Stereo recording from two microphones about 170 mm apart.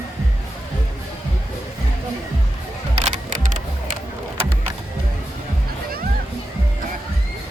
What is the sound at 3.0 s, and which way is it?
Music, 45° right (ahead or behind).